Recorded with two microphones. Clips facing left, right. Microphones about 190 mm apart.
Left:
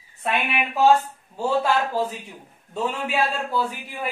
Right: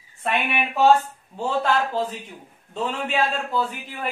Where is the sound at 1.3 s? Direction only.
10° left (ahead or behind).